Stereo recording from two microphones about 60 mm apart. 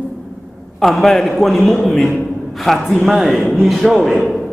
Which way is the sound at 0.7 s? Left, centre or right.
Centre.